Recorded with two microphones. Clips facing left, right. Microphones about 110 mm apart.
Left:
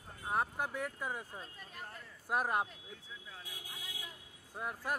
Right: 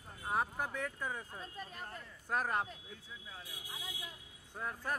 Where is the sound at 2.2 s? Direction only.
15° left (ahead or behind).